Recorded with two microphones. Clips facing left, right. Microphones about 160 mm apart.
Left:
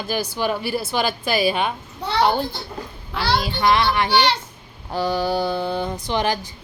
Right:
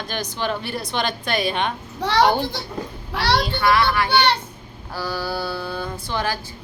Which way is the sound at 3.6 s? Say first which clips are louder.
Left 2 dB; 20° left (ahead or behind).